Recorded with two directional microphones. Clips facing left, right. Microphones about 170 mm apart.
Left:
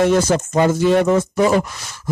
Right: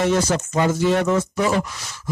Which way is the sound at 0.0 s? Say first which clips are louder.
Left 4 dB; 50° left (ahead or behind).